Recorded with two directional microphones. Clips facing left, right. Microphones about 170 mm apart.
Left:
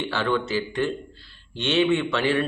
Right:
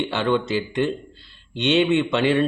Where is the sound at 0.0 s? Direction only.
20° right (ahead or behind).